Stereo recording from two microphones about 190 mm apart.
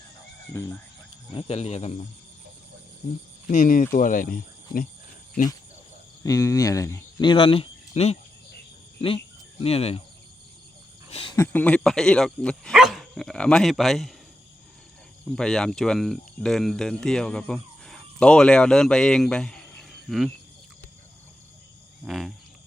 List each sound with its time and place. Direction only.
0.5 s speech: 15° left (ahead or behind)
1.3 s speech: 30° left (ahead or behind)
3.5 s speech: 45° left (ahead or behind)
6.2 s speech: 15° left (ahead or behind); by 10.0 s 30° left (ahead or behind)
11.1 s a sound: 30° left (ahead or behind)
11.3 s speech: 10° left (ahead or behind)
15.4 s speech: 5° left (ahead or behind)
22.0 s cricket: centre (ahead or behind)